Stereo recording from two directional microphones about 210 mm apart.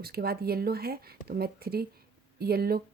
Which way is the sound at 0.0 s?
45° right (ahead or behind).